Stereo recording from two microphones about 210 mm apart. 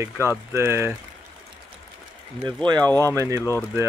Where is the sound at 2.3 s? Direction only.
20° right (ahead or behind).